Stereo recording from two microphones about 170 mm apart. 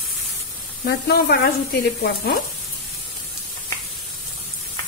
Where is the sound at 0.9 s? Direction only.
70° left (ahead or behind).